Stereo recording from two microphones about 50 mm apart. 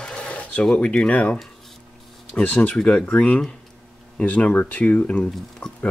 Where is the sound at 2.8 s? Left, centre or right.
Centre.